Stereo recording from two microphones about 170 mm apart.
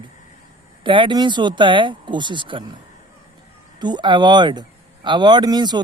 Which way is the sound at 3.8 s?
25° right (ahead or behind).